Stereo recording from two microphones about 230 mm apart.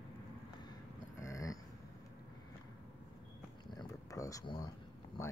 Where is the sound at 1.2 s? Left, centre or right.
Centre.